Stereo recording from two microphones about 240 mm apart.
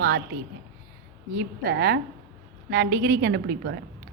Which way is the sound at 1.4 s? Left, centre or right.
Right.